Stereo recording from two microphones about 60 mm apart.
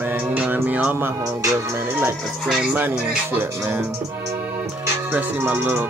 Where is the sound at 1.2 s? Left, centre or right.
Right.